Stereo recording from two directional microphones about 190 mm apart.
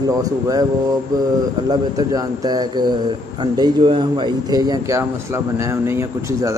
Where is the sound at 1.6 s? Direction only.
20° right (ahead or behind).